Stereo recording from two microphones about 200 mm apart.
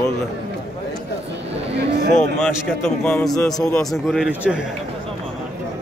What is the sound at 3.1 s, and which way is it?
A man's voice, 5° left (ahead or behind).